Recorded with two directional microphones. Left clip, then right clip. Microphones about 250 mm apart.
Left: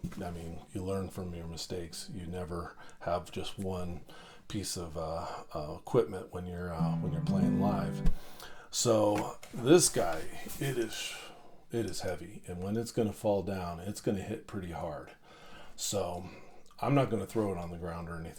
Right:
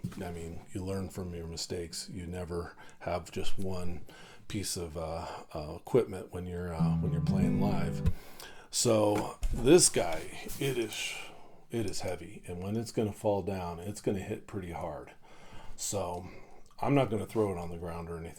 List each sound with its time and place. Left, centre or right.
0.7 s speech: right
15.9 s speech: right